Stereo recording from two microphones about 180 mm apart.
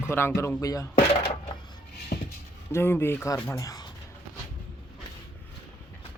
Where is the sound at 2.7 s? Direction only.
15° left (ahead or behind).